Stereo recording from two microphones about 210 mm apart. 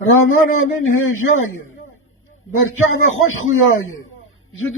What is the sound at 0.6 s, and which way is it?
Speech, 70° left (ahead or behind).